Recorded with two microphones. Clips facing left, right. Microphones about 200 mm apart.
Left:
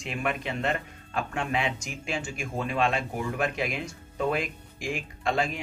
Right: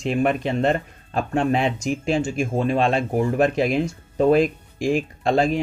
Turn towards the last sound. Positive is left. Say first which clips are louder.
# right 8 dB
turn(degrees=-35)  # may be behind; listen again after turning